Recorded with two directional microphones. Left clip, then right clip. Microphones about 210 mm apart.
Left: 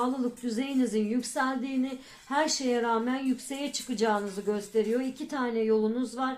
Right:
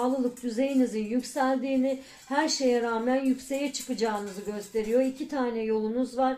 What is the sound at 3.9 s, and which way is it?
Speech, 35° left (ahead or behind).